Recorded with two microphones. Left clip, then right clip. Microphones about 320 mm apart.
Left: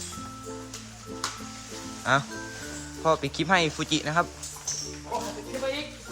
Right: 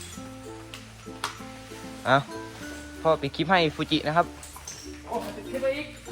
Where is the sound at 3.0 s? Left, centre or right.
Centre.